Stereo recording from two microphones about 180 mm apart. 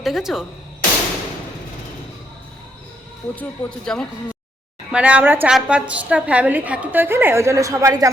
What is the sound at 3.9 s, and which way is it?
Speech, 5° left (ahead or behind).